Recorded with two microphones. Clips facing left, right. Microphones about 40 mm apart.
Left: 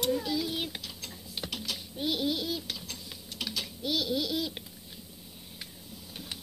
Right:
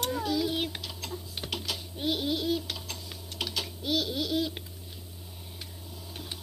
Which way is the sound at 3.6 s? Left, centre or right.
Right.